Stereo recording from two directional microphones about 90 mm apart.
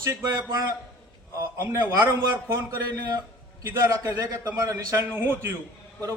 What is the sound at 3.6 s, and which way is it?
A man's voice, 30° right (ahead or behind).